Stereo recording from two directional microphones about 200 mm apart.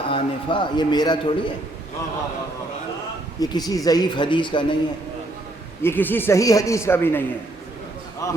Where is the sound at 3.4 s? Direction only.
20° left (ahead or behind).